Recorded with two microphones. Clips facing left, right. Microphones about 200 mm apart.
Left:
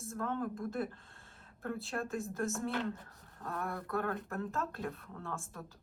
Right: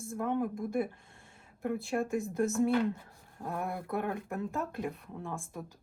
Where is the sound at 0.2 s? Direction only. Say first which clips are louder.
Right 5 dB; 15° right (ahead or behind).